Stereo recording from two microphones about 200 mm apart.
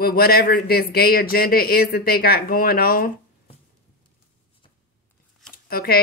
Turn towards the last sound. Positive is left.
turn(degrees=50)  # may be behind; listen again after turning